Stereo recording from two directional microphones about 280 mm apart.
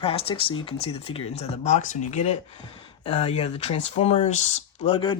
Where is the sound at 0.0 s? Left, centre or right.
Centre.